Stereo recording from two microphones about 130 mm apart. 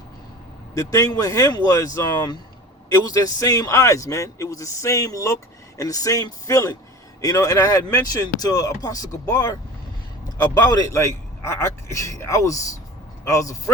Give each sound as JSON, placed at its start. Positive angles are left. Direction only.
{"t": 0.7, "sound": "a man's voice", "side_deg": 25}